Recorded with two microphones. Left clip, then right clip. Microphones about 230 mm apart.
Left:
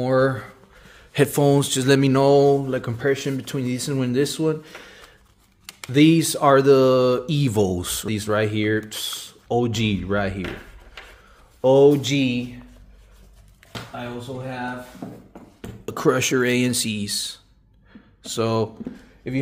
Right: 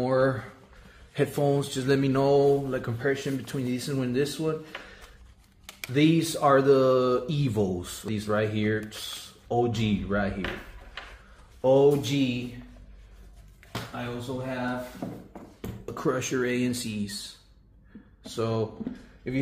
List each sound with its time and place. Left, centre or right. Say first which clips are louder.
0.0 s speech: left 5 dB; left
5.9 s speech: left 7 dB; left
11.6 s speech: left 6 dB; left
15.0 s a sound: even; centre
15.8 s speech: left 9 dB; left
18.2 s speech: left 6 dB; left